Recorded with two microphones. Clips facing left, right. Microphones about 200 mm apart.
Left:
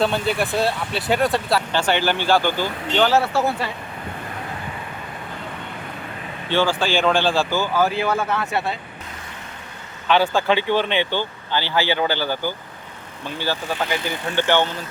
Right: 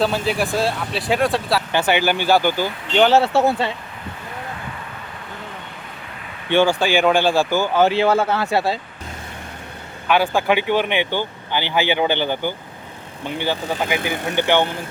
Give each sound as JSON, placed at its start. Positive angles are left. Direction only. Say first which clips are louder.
{"t": 0.0, "sound": "speech", "louder": "right 1 dB", "side_deg": 0}
{"t": 1.7, "sound": "speech", "louder": "right 5 dB", "side_deg": -10}
{"t": 6.5, "sound": "speech", "louder": "right 4 dB", "side_deg": -15}
{"t": 10.1, "sound": "speech", "louder": "right 1 dB", "side_deg": -10}